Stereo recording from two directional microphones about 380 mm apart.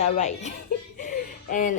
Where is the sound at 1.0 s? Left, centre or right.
Left.